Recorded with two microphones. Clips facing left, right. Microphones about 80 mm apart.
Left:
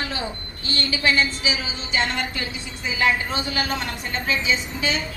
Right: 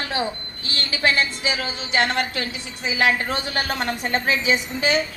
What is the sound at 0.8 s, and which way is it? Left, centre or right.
Speech, right.